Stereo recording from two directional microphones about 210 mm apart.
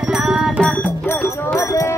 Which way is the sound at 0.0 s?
5° right (ahead or behind).